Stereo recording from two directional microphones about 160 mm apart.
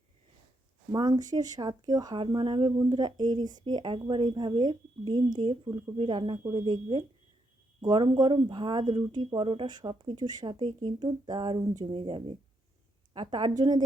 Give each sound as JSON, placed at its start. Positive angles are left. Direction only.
{"t": 0.9, "sound": "speech", "side_deg": -25}